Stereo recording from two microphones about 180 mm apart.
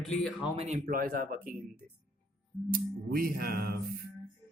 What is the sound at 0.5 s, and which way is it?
Speech, 35° right (ahead or behind).